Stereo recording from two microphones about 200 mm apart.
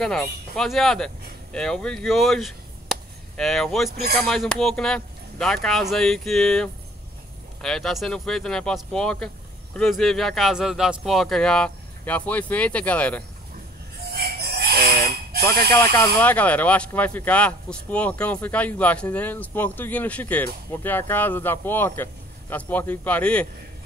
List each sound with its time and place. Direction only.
0.0 s speech: centre (ahead or behind)
14.1 s a sound: 50° right (ahead or behind)
15.7 s speech: 15° left (ahead or behind)